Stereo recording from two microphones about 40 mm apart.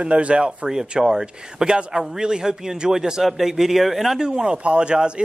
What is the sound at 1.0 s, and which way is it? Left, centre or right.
Speech, centre.